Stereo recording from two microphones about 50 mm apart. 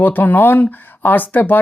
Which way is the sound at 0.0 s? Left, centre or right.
Left.